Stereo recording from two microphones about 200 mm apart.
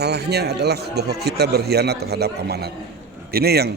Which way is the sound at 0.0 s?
55° right (ahead or behind).